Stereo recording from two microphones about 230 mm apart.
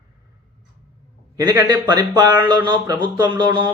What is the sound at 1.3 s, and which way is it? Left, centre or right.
A man's voice, centre.